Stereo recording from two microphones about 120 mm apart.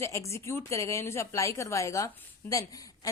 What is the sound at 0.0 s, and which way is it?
A woman's voice, 25° left (ahead or behind).